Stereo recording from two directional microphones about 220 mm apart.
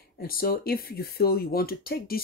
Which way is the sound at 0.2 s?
40° left (ahead or behind).